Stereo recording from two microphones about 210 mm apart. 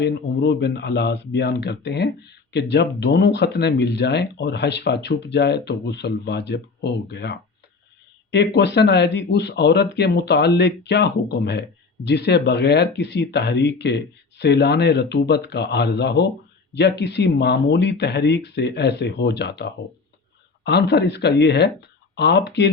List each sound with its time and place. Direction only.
0.0 s speech: 50° left (ahead or behind)